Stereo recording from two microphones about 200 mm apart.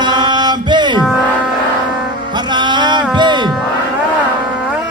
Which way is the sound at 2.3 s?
20° right (ahead or behind).